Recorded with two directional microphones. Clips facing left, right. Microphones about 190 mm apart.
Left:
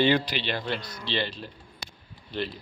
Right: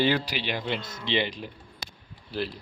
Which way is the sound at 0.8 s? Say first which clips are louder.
Right 3 dB; 25° right (ahead or behind).